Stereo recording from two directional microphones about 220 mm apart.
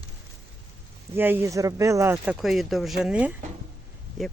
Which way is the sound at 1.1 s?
10° right (ahead or behind).